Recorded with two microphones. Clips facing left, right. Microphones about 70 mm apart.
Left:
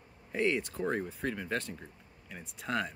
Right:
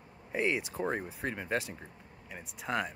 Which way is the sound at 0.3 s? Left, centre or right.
Centre.